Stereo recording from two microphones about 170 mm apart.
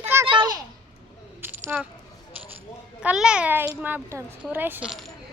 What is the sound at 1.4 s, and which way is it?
Coin, 10° right (ahead or behind).